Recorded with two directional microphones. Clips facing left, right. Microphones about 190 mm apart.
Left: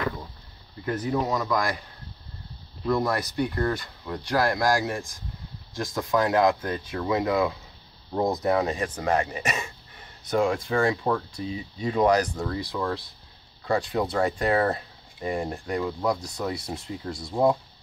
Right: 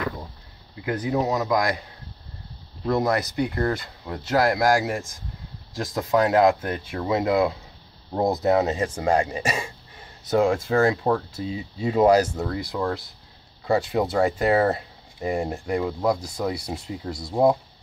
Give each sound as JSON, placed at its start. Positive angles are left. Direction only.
{"t": 0.8, "sound": "speech", "side_deg": -20}
{"t": 2.8, "sound": "speech", "side_deg": -15}